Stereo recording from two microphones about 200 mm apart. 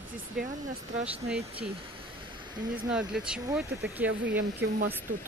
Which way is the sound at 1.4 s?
30° right (ahead or behind).